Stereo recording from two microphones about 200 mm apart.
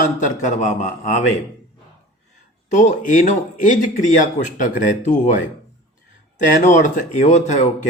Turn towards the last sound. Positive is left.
turn(degrees=35)  # may be behind; listen again after turning